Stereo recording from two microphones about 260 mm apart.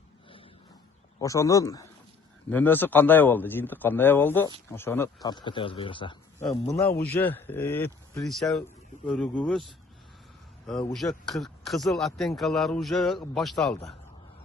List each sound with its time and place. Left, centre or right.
1.2 s a man's voice: centre
10.7 s speech: centre